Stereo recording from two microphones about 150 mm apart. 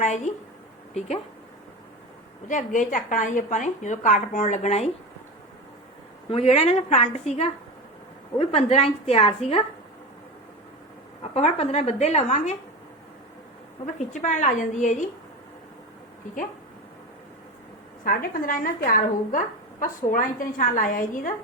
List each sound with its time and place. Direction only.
0.0 s a woman's voice: 55° left (ahead or behind)
2.5 s a woman's voice: 60° left (ahead or behind)
6.3 s a woman's voice: 40° left (ahead or behind)
11.2 s a woman's voice: 45° left (ahead or behind)
13.8 s a woman's voice: 55° left (ahead or behind)
18.0 s a woman's voice: 70° left (ahead or behind)